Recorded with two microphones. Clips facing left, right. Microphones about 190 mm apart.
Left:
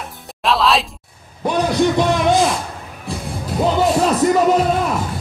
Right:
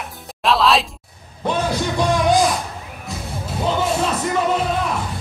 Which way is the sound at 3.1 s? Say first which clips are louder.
Left 5 dB; 30° left (ahead or behind).